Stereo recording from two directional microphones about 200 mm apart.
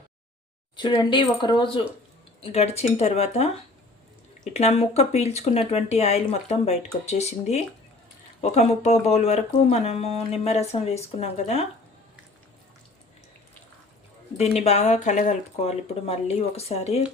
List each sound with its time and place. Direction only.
0.8 s speech: 25° left (ahead or behind)
14.3 s speech: 30° left (ahead or behind)